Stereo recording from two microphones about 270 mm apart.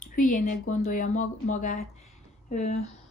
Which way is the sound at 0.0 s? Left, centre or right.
Left.